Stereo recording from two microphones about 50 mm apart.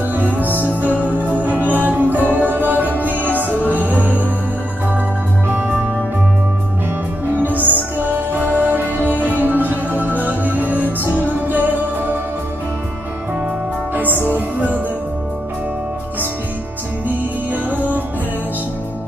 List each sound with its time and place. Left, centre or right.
0.1 s music: right
5.5 s music: right
7.3 s music: right
14.2 s music: right